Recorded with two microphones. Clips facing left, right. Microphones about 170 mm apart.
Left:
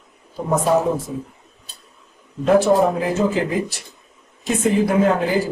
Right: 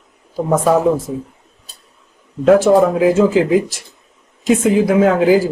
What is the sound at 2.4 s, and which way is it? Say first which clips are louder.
Speech: right 5 dB; 90° right.